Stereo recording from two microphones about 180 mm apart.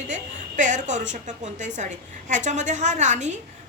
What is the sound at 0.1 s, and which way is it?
A woman's voice, 45° right (ahead or behind).